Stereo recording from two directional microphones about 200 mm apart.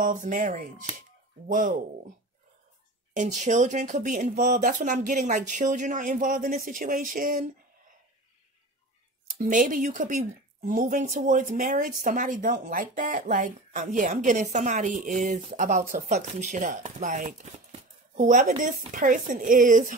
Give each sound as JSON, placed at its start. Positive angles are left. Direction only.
{"t": 0.0, "sound": "speech", "side_deg": -40}
{"t": 3.2, "sound": "speech", "side_deg": -40}
{"t": 9.4, "sound": "speech", "side_deg": -40}